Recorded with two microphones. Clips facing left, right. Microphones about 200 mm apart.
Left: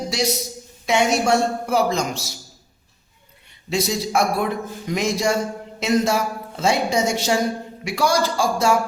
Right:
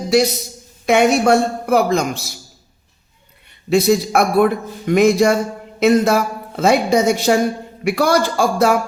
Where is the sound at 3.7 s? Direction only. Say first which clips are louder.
Right 8 dB; 60° right (ahead or behind).